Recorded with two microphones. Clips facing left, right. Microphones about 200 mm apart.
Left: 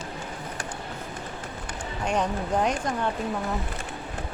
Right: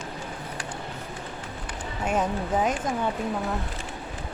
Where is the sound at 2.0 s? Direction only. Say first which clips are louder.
Even; 5° right (ahead or behind).